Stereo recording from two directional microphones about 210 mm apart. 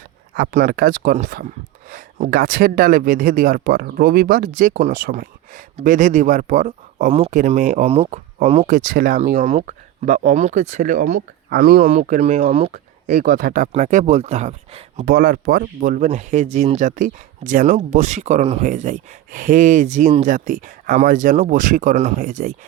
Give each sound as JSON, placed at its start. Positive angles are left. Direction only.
{"t": 0.3, "sound": "speech", "side_deg": -45}
{"t": 15.0, "sound": "speech", "side_deg": -45}